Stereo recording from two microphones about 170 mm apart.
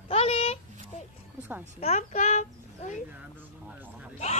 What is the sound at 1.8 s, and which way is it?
Speech, 40° left (ahead or behind).